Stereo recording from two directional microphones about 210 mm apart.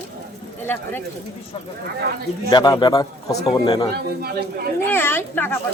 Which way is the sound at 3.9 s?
50° right (ahead or behind).